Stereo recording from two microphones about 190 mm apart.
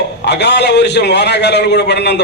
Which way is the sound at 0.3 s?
65° left (ahead or behind).